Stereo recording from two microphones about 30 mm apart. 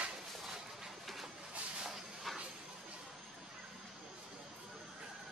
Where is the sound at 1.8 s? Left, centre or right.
Centre.